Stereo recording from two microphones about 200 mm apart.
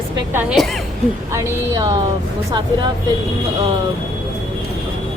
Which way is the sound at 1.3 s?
20° right (ahead or behind).